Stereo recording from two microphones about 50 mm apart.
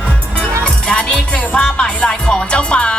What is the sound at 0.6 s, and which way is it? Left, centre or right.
Music, left.